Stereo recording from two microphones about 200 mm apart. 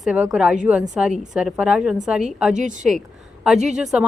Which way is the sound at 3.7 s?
Centre (ahead or behind).